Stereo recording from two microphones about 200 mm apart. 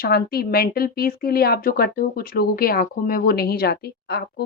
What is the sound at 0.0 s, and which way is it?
Speech, 50° left (ahead or behind).